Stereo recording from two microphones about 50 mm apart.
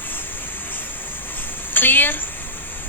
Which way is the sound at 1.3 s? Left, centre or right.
Left.